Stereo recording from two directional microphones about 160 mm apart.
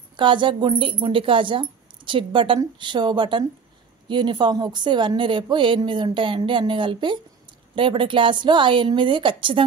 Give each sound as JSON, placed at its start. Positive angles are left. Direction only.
{"t": 0.1, "sound": "a woman's voice", "side_deg": -30}